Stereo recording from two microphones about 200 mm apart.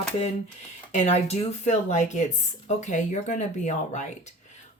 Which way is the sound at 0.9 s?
35° left (ahead or behind).